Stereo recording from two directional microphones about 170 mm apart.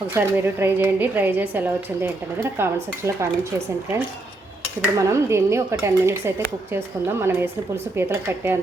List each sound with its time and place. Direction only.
0.1 s a woman's voice: 10° right (ahead or behind)
4.9 s a woman's voice: 15° right (ahead or behind)